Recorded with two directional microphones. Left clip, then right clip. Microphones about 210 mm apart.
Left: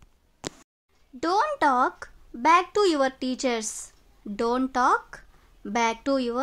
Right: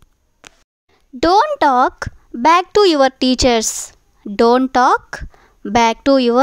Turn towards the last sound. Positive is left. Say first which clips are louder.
# right 13 dB
turn(degrees=-40)  # may be behind; listen again after turning